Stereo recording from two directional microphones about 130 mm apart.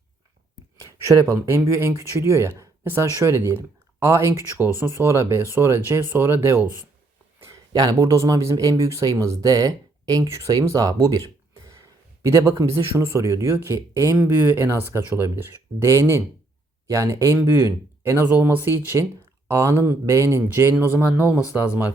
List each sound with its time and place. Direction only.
1.0 s speech: 20° right (ahead or behind)
7.7 s speech: 30° right (ahead or behind)
12.2 s speech: 25° right (ahead or behind)